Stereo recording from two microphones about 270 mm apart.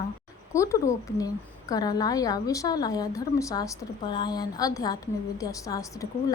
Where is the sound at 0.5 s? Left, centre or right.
Centre.